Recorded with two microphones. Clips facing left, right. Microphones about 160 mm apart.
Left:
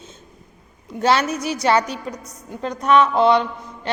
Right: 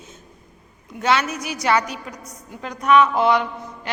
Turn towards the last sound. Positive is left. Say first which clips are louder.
# left 1 dB
turn(degrees=25)  # may be behind; listen again after turning